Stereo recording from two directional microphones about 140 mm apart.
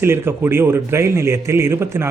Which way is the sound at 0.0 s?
15° right (ahead or behind).